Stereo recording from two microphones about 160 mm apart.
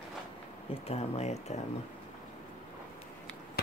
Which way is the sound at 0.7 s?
40° left (ahead or behind).